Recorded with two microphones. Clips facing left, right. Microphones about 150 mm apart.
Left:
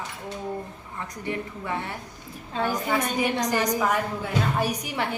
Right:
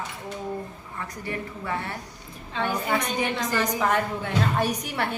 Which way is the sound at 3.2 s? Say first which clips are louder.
Left 2 dB; 15° left (ahead or behind).